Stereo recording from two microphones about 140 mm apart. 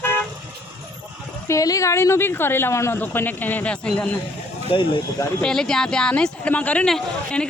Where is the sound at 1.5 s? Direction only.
25° left (ahead or behind); by 4.1 s 10° left (ahead or behind).